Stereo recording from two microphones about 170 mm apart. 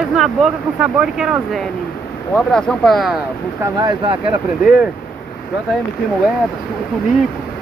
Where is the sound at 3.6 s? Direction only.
25° right (ahead or behind).